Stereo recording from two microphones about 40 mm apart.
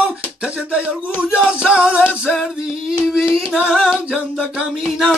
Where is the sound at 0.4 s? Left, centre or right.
Right.